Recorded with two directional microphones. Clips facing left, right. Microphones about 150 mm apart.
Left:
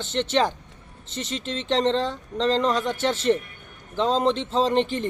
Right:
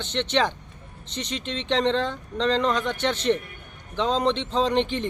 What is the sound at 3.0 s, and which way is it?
Speech, 40° left (ahead or behind).